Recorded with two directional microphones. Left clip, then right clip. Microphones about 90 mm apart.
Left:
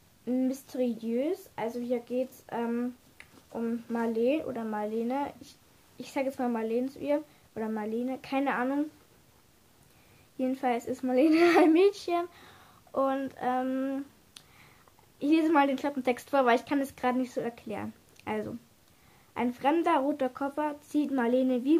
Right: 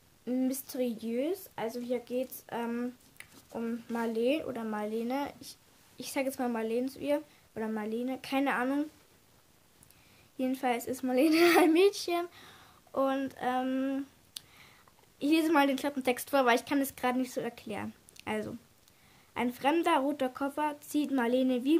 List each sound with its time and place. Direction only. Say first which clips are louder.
0.2 s speech: left 2 dB; 25° right (ahead or behind)
10.3 s speech: left 2 dB; 30° right (ahead or behind)